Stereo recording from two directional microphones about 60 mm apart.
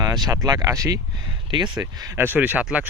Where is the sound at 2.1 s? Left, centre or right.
Right.